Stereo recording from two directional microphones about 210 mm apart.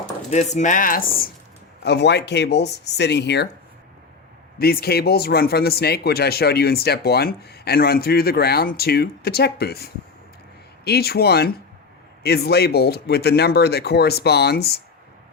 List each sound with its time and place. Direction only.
0.3 s speech: 35° left (ahead or behind)
1.8 s a man's voice: 55° left (ahead or behind)
4.5 s a man's voice: 45° left (ahead or behind)